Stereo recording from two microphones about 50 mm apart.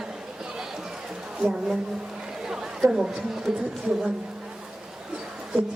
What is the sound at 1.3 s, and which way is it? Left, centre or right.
A woman's voice, centre.